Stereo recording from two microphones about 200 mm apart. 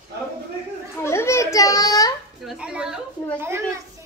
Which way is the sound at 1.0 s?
15° left (ahead or behind).